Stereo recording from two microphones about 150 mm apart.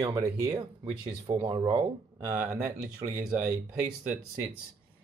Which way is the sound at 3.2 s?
5° right (ahead or behind).